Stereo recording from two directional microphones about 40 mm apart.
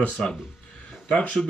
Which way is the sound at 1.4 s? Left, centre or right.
Centre.